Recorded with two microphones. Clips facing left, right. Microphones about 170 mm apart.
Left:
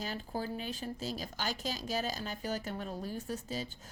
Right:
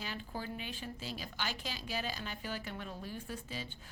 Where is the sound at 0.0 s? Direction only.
40° left (ahead or behind).